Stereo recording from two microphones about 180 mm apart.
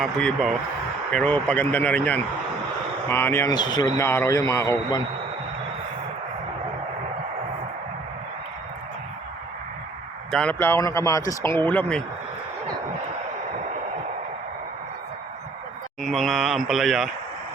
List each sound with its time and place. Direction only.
0.0 s speech: 5° left (ahead or behind); by 5.0 s 20° left (ahead or behind)
10.3 s speech: 10° left (ahead or behind)
16.0 s speech: centre (ahead or behind)